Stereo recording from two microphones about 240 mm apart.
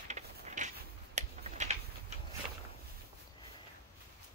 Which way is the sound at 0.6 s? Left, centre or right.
Right.